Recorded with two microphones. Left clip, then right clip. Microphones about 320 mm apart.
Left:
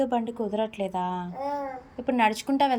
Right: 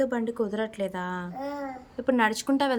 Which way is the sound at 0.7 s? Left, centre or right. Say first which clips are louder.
Even; right.